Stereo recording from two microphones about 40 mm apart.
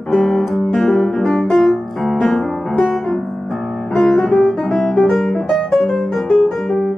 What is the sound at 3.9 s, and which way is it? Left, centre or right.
Music, centre.